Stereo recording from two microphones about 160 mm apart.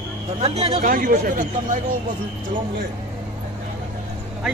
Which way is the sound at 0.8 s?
60° right (ahead or behind).